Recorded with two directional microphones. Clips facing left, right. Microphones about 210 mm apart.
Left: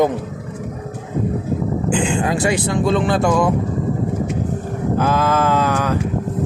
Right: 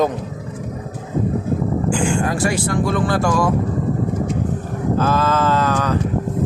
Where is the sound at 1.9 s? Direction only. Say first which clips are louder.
Left 2 dB; 20° left (ahead or behind).